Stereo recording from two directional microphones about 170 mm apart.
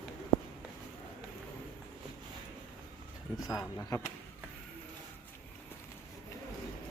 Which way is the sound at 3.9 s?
20° left (ahead or behind).